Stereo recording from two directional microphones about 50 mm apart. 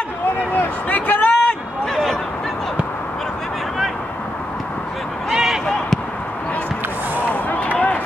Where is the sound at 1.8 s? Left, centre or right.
Centre.